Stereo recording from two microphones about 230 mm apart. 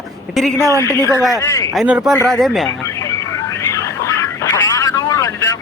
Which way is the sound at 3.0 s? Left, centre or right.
Centre.